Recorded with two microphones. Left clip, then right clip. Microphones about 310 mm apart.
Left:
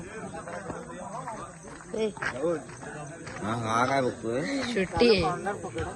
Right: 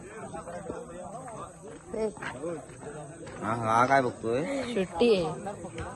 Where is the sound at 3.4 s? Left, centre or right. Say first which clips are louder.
Right 2 dB; centre.